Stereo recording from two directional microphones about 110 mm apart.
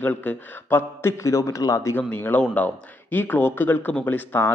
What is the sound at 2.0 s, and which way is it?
Speech, 15° left (ahead or behind).